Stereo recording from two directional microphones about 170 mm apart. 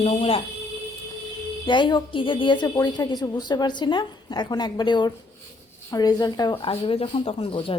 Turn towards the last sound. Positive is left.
turn(degrees=30)  # may be behind; listen again after turning